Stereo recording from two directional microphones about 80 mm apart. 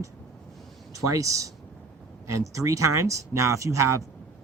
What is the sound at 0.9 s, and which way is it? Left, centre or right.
Speech, right.